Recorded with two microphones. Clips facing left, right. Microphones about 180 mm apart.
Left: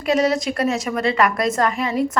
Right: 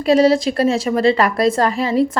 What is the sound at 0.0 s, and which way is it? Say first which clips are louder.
A woman's voice: right 6 dB; 30° right (ahead or behind).